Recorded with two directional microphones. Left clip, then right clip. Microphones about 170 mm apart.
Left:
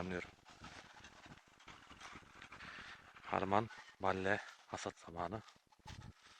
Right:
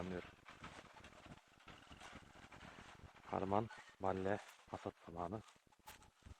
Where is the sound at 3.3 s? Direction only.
10° left (ahead or behind).